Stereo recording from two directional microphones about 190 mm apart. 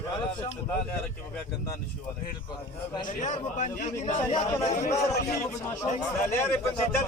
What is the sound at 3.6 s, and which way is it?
A man's voice, 40° left (ahead or behind).